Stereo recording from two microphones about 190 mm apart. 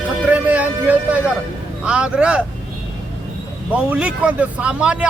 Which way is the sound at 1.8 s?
5° right (ahead or behind).